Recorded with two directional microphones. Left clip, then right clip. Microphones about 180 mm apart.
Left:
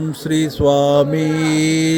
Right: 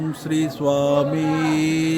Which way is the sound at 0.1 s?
30° left (ahead or behind).